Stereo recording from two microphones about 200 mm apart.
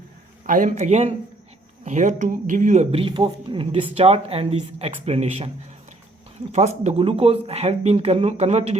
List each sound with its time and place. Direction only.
0.4 s speech: 40° right (ahead or behind)
6.5 s speech: 35° right (ahead or behind)